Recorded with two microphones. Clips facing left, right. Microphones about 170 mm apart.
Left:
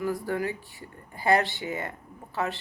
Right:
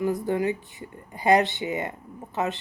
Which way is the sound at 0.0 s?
20° right (ahead or behind).